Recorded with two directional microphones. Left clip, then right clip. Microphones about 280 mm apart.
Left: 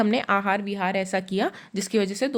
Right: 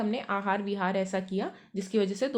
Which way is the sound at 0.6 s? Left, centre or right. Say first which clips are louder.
Left 4 dB; centre.